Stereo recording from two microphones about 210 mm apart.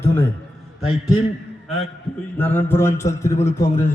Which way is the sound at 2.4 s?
10° left (ahead or behind).